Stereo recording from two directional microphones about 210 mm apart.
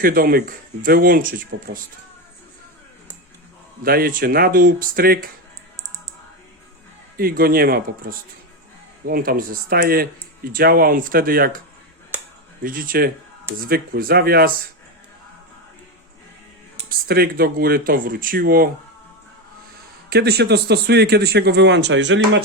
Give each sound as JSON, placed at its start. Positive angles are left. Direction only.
{"t": 0.0, "sound": "speech", "side_deg": -45}
{"t": 3.8, "sound": "speech", "side_deg": -45}
{"t": 7.2, "sound": "speech", "side_deg": -45}
{"t": 12.6, "sound": "speech", "side_deg": -40}
{"t": 17.1, "sound": "speech", "side_deg": -45}
{"t": 20.1, "sound": "speech", "side_deg": -50}